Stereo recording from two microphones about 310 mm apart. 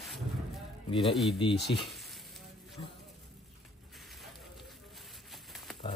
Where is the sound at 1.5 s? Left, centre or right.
Left.